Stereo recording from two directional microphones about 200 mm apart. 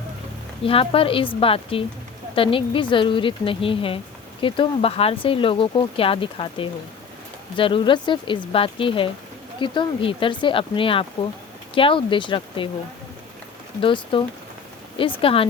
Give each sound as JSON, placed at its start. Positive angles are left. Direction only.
{"t": 0.6, "sound": "a woman's voice", "side_deg": 30}
{"t": 13.8, "sound": "a woman's voice", "side_deg": 25}
{"t": 15.2, "sound": "a woman's voice", "side_deg": 25}